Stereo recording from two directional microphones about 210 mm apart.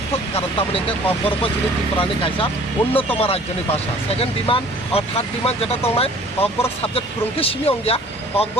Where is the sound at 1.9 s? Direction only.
25° left (ahead or behind).